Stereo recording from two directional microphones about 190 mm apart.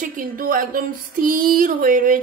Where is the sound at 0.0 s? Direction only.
45° right (ahead or behind).